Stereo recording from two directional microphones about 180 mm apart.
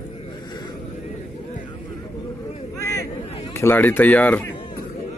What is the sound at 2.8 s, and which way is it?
Vehicle, 15° left (ahead or behind).